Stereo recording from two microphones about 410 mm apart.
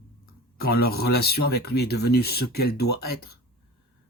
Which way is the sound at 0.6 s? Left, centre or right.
Left.